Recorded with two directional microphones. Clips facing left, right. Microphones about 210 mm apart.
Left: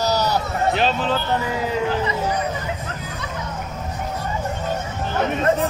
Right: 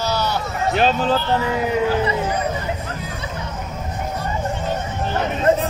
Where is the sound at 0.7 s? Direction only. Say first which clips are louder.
Right 7 dB; 45° right (ahead or behind).